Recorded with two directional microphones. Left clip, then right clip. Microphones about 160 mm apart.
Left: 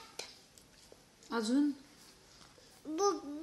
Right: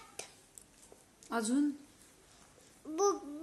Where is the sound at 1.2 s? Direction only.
25° right (ahead or behind).